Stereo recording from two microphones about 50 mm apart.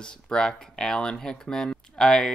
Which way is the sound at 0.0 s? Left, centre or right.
Centre.